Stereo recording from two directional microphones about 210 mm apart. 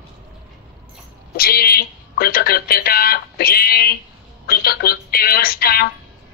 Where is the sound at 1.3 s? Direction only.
45° left (ahead or behind).